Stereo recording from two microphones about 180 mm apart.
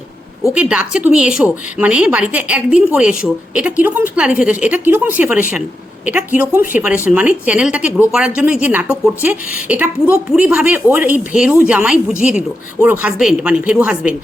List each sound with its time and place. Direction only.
0.5 s a woman's voice: 5° right (ahead or behind)